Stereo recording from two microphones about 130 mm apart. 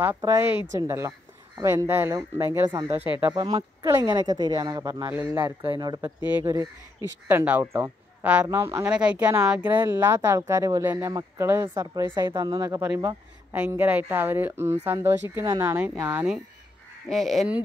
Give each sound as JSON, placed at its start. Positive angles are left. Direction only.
{"t": 0.2, "sound": "speech", "side_deg": -20}
{"t": 3.3, "sound": "speech", "side_deg": -30}
{"t": 5.6, "sound": "speech", "side_deg": -35}
{"t": 6.2, "sound": "speech", "side_deg": -15}
{"t": 8.8, "sound": "speech", "side_deg": -10}
{"t": 12.9, "sound": "speech", "side_deg": -15}
{"t": 17.1, "sound": "speech", "side_deg": 0}